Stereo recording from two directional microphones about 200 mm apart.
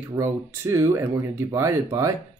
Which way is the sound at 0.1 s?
15° right (ahead or behind).